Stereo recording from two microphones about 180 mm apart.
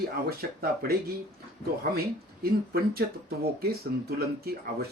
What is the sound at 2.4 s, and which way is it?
Speech, 60° right (ahead or behind).